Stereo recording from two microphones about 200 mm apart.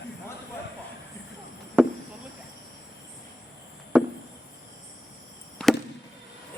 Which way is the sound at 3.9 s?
5° right (ahead or behind).